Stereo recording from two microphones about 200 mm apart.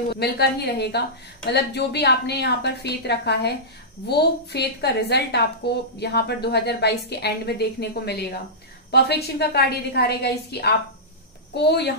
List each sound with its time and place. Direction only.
0.1 s a woman's voice: 55° left (ahead or behind)